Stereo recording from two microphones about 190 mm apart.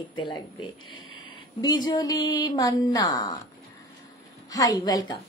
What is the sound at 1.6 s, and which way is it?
A woman's voice, 20° left (ahead or behind).